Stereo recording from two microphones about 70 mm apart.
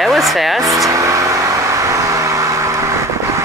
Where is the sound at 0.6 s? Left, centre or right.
Right.